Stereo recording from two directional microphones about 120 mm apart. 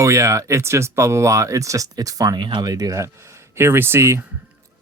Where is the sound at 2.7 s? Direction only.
25° right (ahead or behind).